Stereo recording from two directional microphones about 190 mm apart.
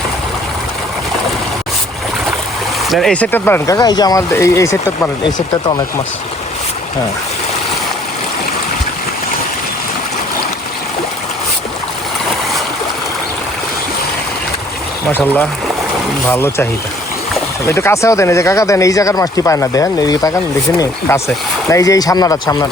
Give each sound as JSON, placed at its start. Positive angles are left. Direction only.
{"t": 2.9, "sound": "speech", "side_deg": 5}
{"t": 15.1, "sound": "speech", "side_deg": 10}
{"t": 17.7, "sound": "speech", "side_deg": 15}